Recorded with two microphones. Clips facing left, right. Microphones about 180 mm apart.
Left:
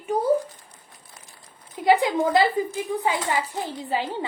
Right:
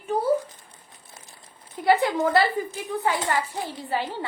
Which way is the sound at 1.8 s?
15° left (ahead or behind).